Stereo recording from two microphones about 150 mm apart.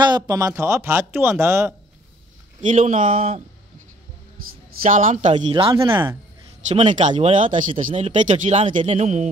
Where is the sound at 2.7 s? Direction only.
55° right (ahead or behind).